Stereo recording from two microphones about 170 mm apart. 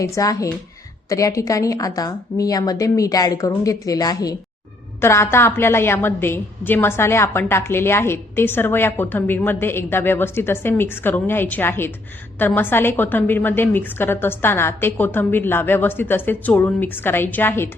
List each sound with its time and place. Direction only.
0.0 s a woman's voice: 20° left (ahead or behind)